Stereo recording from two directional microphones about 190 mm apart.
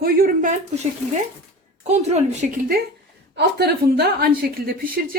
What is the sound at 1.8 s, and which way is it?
Speech, 35° right (ahead or behind).